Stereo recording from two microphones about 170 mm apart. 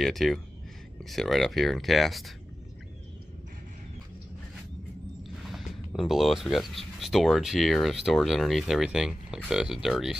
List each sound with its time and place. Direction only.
0.0 s speech: centre (ahead or behind)
5.4 s speech: centre (ahead or behind)